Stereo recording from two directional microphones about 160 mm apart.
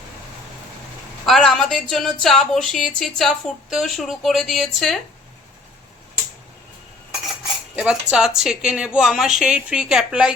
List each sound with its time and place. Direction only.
1.2 s a sound: centre (ahead or behind)
2.2 s a woman's voice: centre (ahead or behind)
7.8 s a woman's voice: 5° right (ahead or behind)